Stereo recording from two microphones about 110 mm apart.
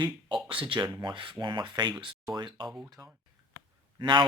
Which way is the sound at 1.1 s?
50° right (ahead or behind).